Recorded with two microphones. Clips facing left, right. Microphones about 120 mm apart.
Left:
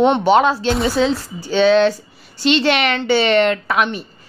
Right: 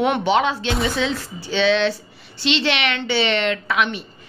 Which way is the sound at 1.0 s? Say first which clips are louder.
Left 6 dB; 40° left (ahead or behind).